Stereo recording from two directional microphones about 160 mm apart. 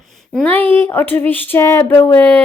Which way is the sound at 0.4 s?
10° left (ahead or behind).